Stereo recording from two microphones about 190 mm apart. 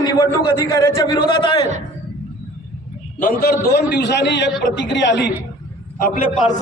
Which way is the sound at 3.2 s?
50° left (ahead or behind).